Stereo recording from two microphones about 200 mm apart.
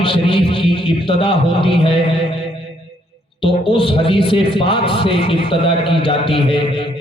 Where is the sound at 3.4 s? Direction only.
25° left (ahead or behind).